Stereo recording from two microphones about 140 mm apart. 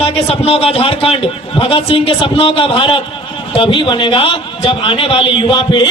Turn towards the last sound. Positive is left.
turn(degrees=35)  # may be behind; listen again after turning